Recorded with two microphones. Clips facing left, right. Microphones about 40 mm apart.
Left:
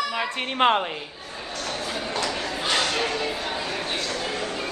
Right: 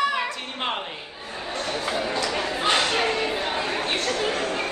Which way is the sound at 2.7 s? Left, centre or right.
Centre.